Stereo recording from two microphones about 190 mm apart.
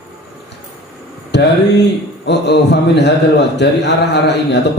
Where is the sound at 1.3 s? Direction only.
65° left (ahead or behind).